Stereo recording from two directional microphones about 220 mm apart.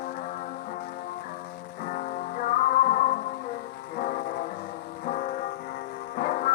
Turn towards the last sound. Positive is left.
turn(degrees=35)  # may be behind; listen again after turning